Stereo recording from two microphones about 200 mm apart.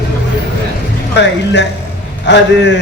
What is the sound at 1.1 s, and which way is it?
A man's voice, 60° left (ahead or behind).